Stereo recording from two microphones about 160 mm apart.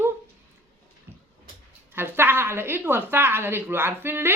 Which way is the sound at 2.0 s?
15° right (ahead or behind).